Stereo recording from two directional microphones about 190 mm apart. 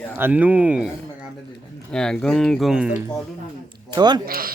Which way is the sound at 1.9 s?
5° left (ahead or behind).